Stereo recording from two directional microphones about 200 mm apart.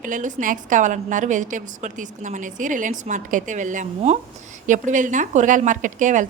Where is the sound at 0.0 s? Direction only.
40° right (ahead or behind).